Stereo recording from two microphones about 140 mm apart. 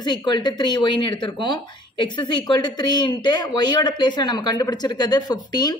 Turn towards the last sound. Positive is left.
turn(degrees=30)  # may be behind; listen again after turning